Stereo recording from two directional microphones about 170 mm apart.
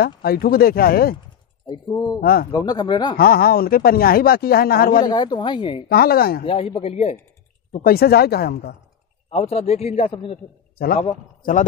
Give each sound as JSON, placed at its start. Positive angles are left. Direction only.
{"t": 0.2, "sound": "speech", "side_deg": 65}
{"t": 1.7, "sound": "speech", "side_deg": 25}
{"t": 2.1, "sound": "speech", "side_deg": 60}
{"t": 2.5, "sound": "speech", "side_deg": 25}
{"t": 3.2, "sound": "speech", "side_deg": 60}
{"t": 5.0, "sound": "speech", "side_deg": 25}
{"t": 5.9, "sound": "speech", "side_deg": 60}
{"t": 6.4, "sound": "a man's voice", "side_deg": 30}
{"t": 7.8, "sound": "speech", "side_deg": 65}
{"t": 9.3, "sound": "a man's voice", "side_deg": 40}
{"t": 11.0, "sound": "a man's voice", "side_deg": 45}